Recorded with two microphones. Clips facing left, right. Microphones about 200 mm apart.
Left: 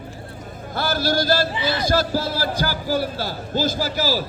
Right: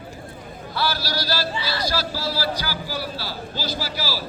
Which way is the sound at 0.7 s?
50° left (ahead or behind).